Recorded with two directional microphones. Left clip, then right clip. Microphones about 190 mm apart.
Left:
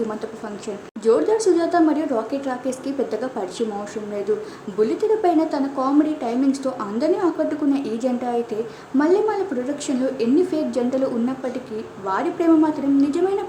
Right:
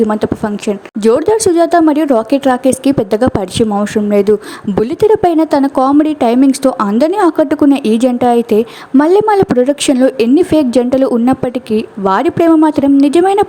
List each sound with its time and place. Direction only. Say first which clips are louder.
0.1 s speech: right 14 dB; 45° right (ahead or behind)
4.8 s speech: right 9 dB; 50° right (ahead or behind)